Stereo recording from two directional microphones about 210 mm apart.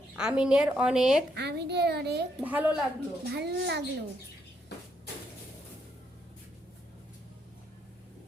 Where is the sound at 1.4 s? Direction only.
50° right (ahead or behind).